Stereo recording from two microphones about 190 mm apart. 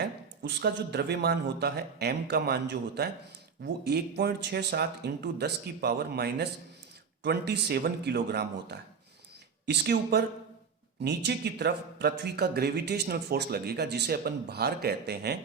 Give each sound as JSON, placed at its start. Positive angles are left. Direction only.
{"t": 0.4, "sound": "speech", "side_deg": -60}